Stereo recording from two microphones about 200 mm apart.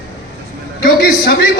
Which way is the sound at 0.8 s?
50° left (ahead or behind).